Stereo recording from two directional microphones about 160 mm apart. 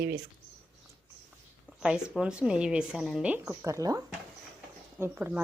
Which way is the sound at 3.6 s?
20° right (ahead or behind).